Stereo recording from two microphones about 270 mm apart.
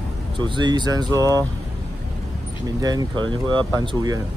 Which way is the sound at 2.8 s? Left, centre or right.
Centre.